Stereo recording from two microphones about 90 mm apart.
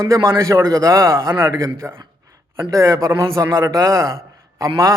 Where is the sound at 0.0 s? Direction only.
35° right (ahead or behind).